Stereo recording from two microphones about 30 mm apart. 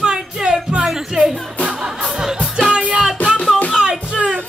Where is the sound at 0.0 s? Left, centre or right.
Right.